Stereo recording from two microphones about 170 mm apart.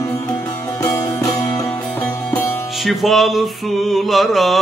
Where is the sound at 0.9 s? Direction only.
15° left (ahead or behind).